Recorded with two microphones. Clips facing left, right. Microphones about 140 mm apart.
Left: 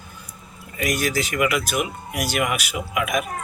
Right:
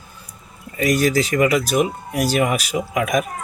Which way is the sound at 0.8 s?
35° right (ahead or behind).